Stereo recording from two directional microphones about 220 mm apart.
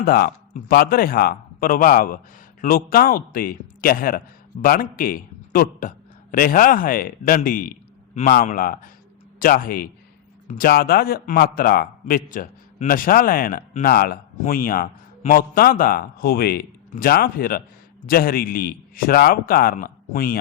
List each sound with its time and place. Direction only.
0.0 s a man's voice: 45° left (ahead or behind)